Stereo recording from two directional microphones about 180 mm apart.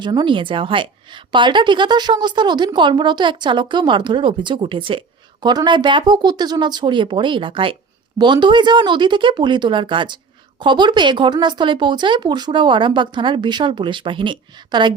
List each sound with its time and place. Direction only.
0.0 s a woman's voice: 25° right (ahead or behind)